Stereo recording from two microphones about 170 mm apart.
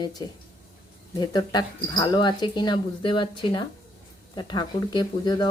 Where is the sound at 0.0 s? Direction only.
25° left (ahead or behind).